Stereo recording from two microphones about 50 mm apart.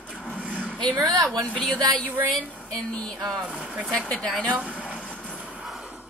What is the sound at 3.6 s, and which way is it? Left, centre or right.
Speech, right.